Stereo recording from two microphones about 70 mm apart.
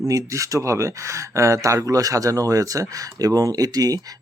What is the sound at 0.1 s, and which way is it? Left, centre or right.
Speech, right.